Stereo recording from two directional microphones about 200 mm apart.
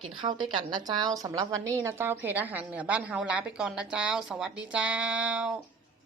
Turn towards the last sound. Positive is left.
turn(degrees=-5)  # may be behind; listen again after turning